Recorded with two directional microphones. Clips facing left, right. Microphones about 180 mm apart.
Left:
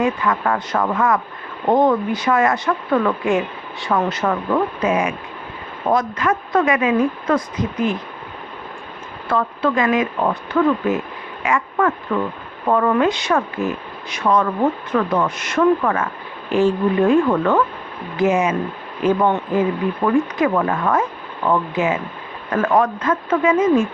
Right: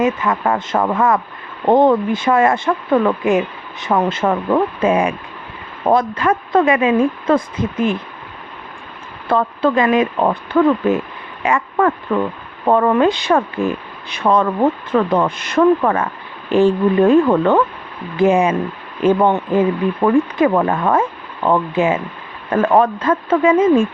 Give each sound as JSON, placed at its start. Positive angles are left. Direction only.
{"t": 0.0, "sound": "speech", "side_deg": -20}
{"t": 9.3, "sound": "speech", "side_deg": -30}